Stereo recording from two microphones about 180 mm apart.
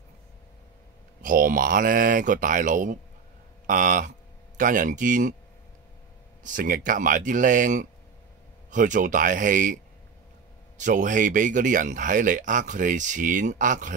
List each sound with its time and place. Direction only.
1.2 s speech: 50° right (ahead or behind)
6.4 s speech: 50° right (ahead or behind)
10.8 s speech: 45° right (ahead or behind)